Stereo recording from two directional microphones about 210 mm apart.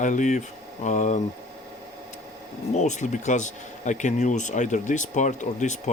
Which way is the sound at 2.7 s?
35° left (ahead or behind).